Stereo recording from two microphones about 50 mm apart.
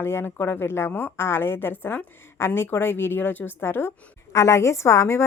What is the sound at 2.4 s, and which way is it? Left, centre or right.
A woman's voice, left.